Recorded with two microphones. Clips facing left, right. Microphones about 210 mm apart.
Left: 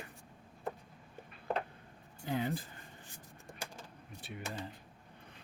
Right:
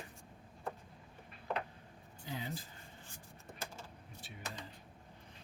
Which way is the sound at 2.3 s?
55° left (ahead or behind).